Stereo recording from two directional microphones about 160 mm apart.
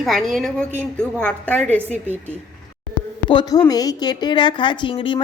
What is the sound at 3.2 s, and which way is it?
A woman's voice, 25° left (ahead or behind).